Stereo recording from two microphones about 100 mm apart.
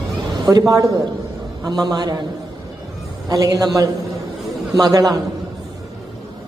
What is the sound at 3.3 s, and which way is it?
A woman's voice, 40° right (ahead or behind).